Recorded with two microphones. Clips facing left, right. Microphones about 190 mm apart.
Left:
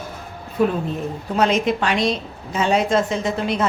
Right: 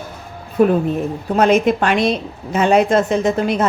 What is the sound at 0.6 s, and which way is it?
A woman's voice, 50° right (ahead or behind).